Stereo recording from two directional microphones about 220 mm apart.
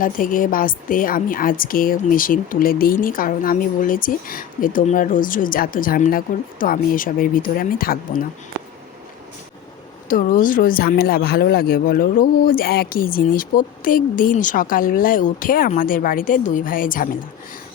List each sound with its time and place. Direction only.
0.0 s a woman's voice: 40° left (ahead or behind)
10.1 s a woman's voice: 40° left (ahead or behind)